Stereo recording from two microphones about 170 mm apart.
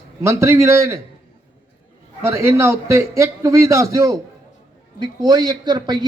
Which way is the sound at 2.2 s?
15° right (ahead or behind).